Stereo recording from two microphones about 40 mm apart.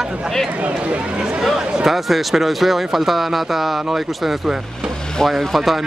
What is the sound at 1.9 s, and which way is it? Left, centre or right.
Speech, centre.